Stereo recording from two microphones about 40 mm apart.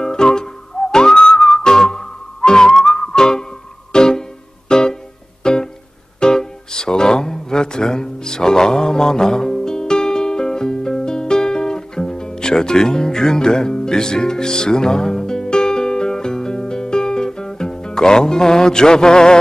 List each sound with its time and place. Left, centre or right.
0.0 s whistling: centre
3.9 s music: centre